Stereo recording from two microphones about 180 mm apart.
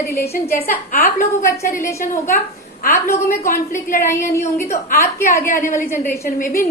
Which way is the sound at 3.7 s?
50° left (ahead or behind).